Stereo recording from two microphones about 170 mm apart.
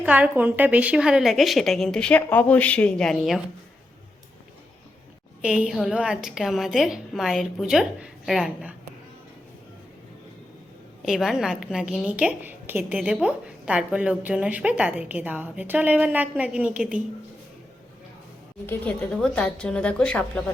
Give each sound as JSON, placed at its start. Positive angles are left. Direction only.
{"t": 0.0, "sound": "a woman's voice", "side_deg": -10}
{"t": 5.4, "sound": "a woman's voice", "side_deg": -5}
{"t": 11.0, "sound": "a woman's voice", "side_deg": 0}
{"t": 18.6, "sound": "a woman's voice", "side_deg": 10}